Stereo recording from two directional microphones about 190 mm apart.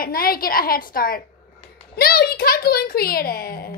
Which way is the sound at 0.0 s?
50° left (ahead or behind).